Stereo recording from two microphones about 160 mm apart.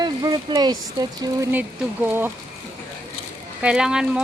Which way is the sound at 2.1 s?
10° right (ahead or behind).